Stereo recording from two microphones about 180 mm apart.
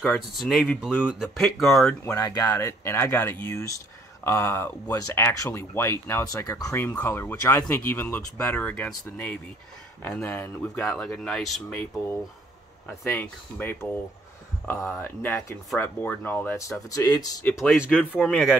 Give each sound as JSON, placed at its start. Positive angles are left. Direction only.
{"t": 0.0, "sound": "speech", "side_deg": 0}
{"t": 2.0, "sound": "speech", "side_deg": 20}
{"t": 13.0, "sound": "speech", "side_deg": 10}
{"t": 15.0, "sound": "speech", "side_deg": 15}
{"t": 17.5, "sound": "speech", "side_deg": 10}